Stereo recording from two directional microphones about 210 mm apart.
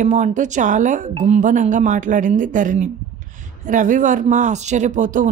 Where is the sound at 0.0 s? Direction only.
35° right (ahead or behind).